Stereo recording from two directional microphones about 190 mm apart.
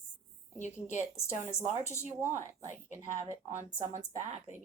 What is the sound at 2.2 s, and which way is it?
Speech, 10° right (ahead or behind).